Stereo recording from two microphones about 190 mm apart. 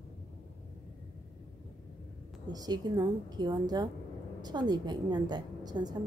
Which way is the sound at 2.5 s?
20° right (ahead or behind).